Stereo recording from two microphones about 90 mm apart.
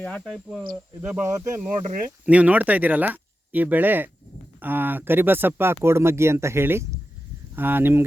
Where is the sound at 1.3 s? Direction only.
35° right (ahead or behind).